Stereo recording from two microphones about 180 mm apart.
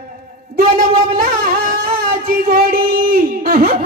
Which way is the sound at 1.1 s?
50° right (ahead or behind).